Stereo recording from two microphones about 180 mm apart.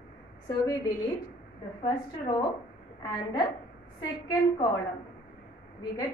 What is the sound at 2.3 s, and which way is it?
Speech, 25° left (ahead or behind).